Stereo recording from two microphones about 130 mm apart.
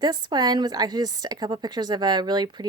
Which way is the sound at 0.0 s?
30° right (ahead or behind).